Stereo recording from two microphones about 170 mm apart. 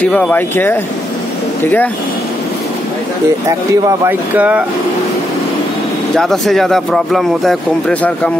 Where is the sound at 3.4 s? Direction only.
20° right (ahead or behind).